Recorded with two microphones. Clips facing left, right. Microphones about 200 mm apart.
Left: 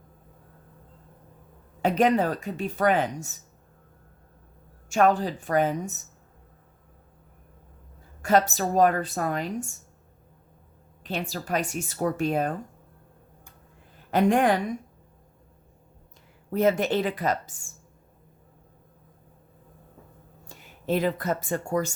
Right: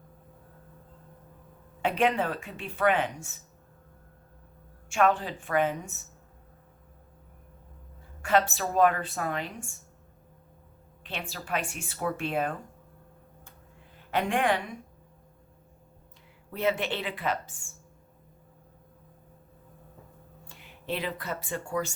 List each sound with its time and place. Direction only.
1.8 s speech: 40° left (ahead or behind)
4.9 s speech: 40° left (ahead or behind)
8.2 s speech: 40° left (ahead or behind)
11.0 s speech: 40° left (ahead or behind)
14.1 s speech: 40° left (ahead or behind)
16.5 s a woman's voice: 45° left (ahead or behind)
20.5 s speech: 45° left (ahead or behind)